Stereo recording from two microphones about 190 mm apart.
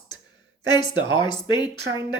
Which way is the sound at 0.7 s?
25° left (ahead or behind).